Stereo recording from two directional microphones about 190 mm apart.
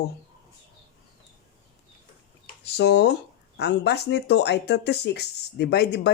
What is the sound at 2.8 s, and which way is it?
Speech, 65° left (ahead or behind).